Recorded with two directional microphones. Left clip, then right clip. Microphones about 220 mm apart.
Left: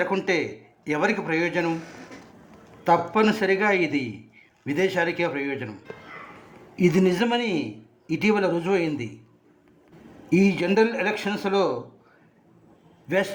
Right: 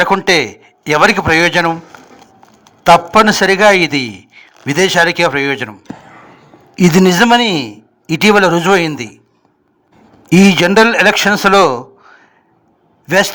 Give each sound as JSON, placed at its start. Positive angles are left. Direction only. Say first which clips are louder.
{"t": 0.3, "sound": "a man's voice", "louder": "right 13 dB", "side_deg": -40}
{"t": 2.8, "sound": "a man's voice", "louder": "right 13 dB", "side_deg": -40}
{"t": 6.7, "sound": "a man's voice", "louder": "right 12 dB", "side_deg": -40}
{"t": 10.2, "sound": "a man's voice", "louder": "right 12 dB", "side_deg": -40}